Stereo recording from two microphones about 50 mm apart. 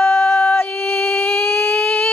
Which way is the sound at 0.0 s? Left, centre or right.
Centre.